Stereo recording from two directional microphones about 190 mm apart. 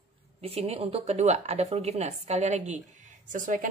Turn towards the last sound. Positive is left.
turn(degrees=-45)  # may be behind; listen again after turning